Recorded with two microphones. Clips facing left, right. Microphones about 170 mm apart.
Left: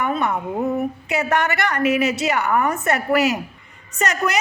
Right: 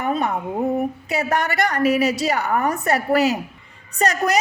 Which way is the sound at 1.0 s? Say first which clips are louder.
Left 1 dB; 35° right (ahead or behind).